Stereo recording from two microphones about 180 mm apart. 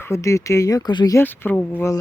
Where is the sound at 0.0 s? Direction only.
15° left (ahead or behind).